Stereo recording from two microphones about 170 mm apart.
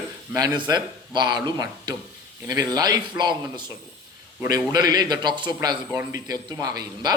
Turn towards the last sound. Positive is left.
turn(degrees=-20)  # may be behind; listen again after turning